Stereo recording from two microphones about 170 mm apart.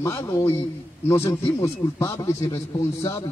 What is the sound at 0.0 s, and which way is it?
A man's voice, 15° left (ahead or behind).